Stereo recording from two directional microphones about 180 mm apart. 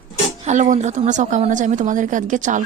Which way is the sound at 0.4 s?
40° right (ahead or behind).